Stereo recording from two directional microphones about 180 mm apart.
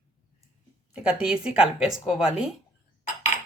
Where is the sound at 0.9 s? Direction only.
5° right (ahead or behind).